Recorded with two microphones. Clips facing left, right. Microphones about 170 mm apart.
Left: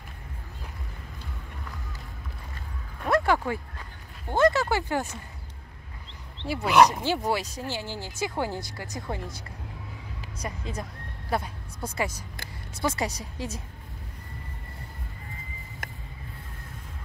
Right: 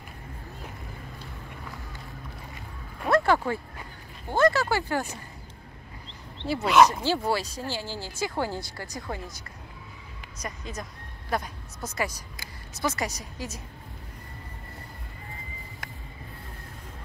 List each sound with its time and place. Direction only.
3.1 s a sound: 10° left (ahead or behind)
4.4 s speech: 20° left (ahead or behind)
6.4 s speech: 15° left (ahead or behind)
10.4 s a woman's voice: 30° left (ahead or behind)